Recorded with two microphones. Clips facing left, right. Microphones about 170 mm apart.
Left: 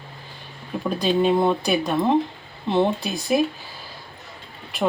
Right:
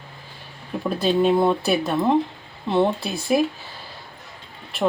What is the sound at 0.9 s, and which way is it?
Speech, 5° right (ahead or behind).